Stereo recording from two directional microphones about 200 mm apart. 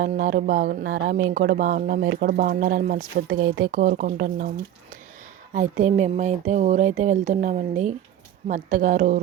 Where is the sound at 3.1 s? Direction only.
65° right (ahead or behind).